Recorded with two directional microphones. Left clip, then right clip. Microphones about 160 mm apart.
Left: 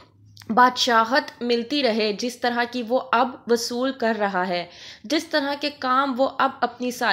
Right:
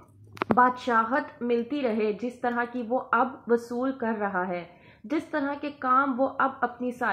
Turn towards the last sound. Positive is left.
turn(degrees=30)  # may be behind; listen again after turning